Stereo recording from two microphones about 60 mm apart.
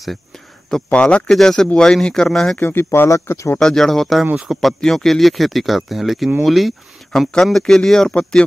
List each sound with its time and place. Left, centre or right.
0.9 s speech: centre
1.2 s speech: centre
2.6 s speech: left
3.5 s speech: centre